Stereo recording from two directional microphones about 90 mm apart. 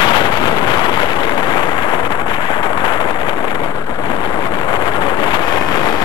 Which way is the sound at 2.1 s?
55° left (ahead or behind).